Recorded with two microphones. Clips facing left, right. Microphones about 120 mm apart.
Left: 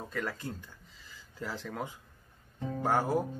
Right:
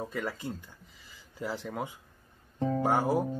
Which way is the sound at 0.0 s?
10° right (ahead or behind).